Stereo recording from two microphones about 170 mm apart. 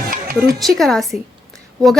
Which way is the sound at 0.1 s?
55° right (ahead or behind).